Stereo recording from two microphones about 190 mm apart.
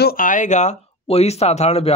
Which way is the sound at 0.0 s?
50° left (ahead or behind).